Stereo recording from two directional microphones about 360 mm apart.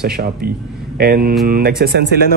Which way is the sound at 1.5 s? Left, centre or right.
Right.